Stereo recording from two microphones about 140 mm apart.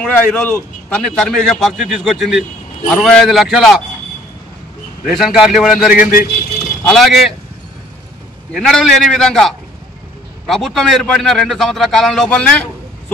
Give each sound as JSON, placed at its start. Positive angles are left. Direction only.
{"t": 0.0, "sound": "a man's voice", "side_deg": 5}
{"t": 5.0, "sound": "a man's voice", "side_deg": -5}
{"t": 8.5, "sound": "a man's voice", "side_deg": 0}